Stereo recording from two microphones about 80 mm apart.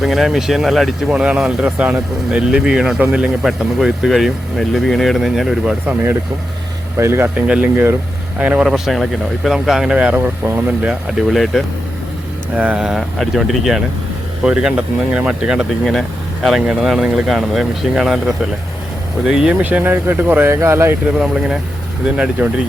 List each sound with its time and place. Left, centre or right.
0.0 s speech: centre
3.4 s speech: centre
5.8 s speech: right
7.3 s speech: centre
8.6 s speech: centre
10.2 s speech: right
10.8 s speech: centre
12.5 s speech: centre
12.8 s speech: centre
15.9 s speech: centre
19.6 s speech: right
22.0 s speech: centre